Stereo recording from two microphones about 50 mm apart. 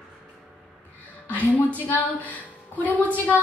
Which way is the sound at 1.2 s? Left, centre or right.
Left.